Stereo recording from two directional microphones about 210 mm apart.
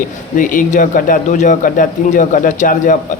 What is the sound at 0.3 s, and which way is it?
Speech, 40° left (ahead or behind).